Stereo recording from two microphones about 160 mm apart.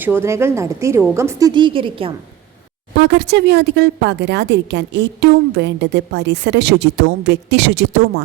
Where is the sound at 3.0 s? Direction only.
90° right.